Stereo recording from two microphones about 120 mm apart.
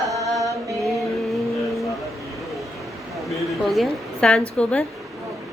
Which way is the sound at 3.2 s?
Centre (ahead or behind).